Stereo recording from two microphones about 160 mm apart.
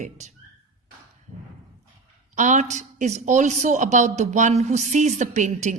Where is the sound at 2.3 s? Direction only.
50° right (ahead or behind).